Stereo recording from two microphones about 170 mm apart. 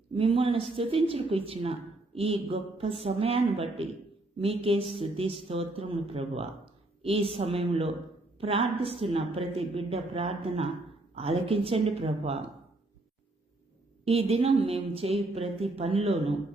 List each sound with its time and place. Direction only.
0.2 s a woman's voice: 30° right (ahead or behind)
14.0 s a woman's voice: 35° right (ahead or behind)